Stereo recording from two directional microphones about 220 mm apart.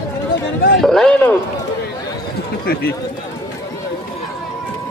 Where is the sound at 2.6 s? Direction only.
45° left (ahead or behind).